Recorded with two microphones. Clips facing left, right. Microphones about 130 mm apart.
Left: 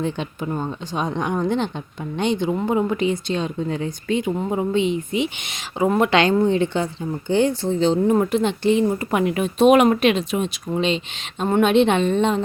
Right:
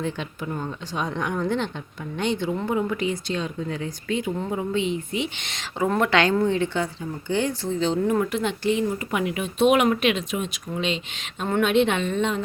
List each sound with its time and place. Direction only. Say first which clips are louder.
0.0 s speech: left 4 dB; 25° left (ahead or behind)
9.0 s speech: left 5 dB; 40° left (ahead or behind)